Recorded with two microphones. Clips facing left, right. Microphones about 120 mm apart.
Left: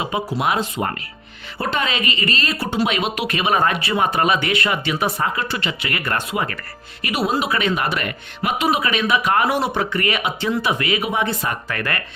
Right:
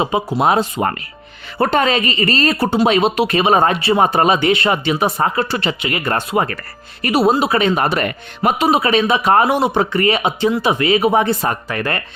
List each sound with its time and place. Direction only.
0.0 s speech: 25° right (ahead or behind)
0.3 s speech: 35° right (ahead or behind)
1.5 s speech: 45° right (ahead or behind)
5.8 s speech: 25° right (ahead or behind)
6.3 s speech: 40° right (ahead or behind)
9.5 s speech: 20° right (ahead or behind); by 11.5 s 40° right (ahead or behind)
11.7 s speech: 30° right (ahead or behind)